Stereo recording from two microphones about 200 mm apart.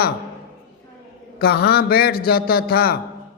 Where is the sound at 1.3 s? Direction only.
50° left (ahead or behind).